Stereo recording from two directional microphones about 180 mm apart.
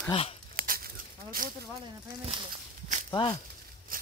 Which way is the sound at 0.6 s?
50° right (ahead or behind).